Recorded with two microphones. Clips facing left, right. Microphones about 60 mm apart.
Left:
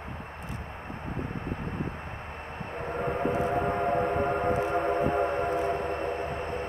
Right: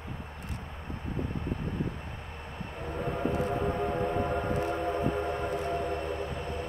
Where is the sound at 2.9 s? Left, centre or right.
Left.